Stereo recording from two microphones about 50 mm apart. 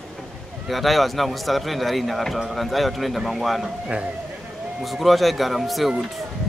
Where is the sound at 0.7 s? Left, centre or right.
Centre.